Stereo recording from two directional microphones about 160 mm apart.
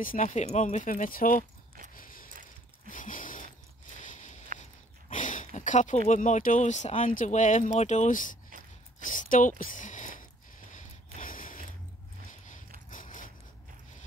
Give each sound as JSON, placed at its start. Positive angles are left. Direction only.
{"t": 0.0, "sound": "speech", "side_deg": 55}
{"t": 2.0, "sound": "mechanisms", "side_deg": 60}
{"t": 2.9, "sound": "a sound", "side_deg": 55}
{"t": 5.9, "sound": "speech", "side_deg": 50}
{"t": 9.0, "sound": "a sound", "side_deg": 55}
{"t": 12.9, "sound": "biting", "side_deg": 55}